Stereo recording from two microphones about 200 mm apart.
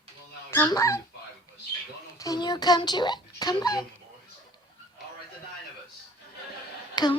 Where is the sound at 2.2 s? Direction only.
20° left (ahead or behind).